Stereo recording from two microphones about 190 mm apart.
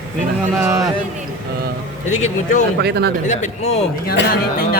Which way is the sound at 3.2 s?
35° left (ahead or behind).